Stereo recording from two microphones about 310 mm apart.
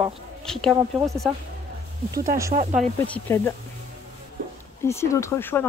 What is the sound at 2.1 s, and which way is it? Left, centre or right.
Speech, right.